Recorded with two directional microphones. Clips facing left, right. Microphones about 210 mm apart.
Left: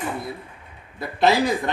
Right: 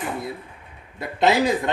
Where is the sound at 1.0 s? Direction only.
20° right (ahead or behind).